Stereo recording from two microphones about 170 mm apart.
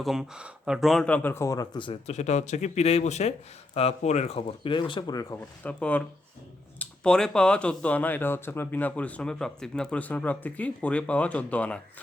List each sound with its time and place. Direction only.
0.0 s speech: centre (ahead or behind); by 5.4 s 20° left (ahead or behind)
5.4 s speech: 10° left (ahead or behind)